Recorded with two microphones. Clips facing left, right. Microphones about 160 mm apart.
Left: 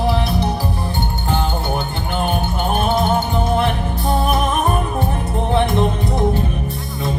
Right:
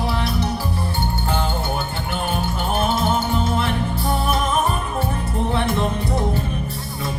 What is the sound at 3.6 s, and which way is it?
Music, 20° left (ahead or behind).